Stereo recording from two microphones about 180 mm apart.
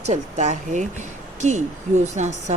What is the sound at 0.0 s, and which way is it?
A woman's voice, 40° right (ahead or behind).